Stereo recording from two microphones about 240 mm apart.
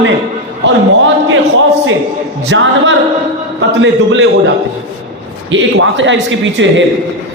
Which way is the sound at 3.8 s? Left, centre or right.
Right.